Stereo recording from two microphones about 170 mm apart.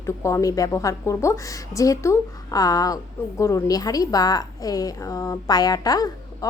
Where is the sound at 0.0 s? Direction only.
15° left (ahead or behind).